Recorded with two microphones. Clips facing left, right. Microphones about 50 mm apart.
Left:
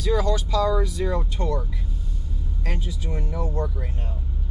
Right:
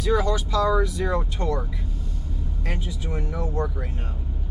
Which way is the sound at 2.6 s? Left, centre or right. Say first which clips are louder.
Even; right.